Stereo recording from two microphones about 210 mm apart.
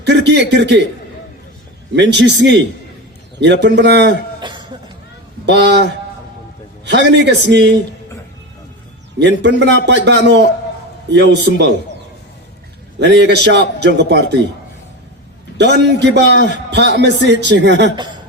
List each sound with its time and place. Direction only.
0.0 s a man's voice: 55° right (ahead or behind)
2.0 s a man's voice: 55° right (ahead or behind)
4.4 s a sound: 20° right (ahead or behind)
5.5 s a man's voice: 55° right (ahead or behind)
9.1 s a man's voice: 55° right (ahead or behind)
13.0 s a man's voice: 55° right (ahead or behind)
15.5 s a man's voice: 55° right (ahead or behind)